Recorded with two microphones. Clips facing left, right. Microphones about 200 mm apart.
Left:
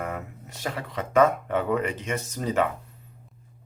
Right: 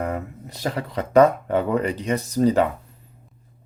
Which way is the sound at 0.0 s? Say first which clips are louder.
Right 6 dB; 35° right (ahead or behind).